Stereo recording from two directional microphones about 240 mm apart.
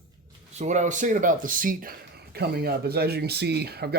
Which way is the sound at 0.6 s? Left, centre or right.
Right.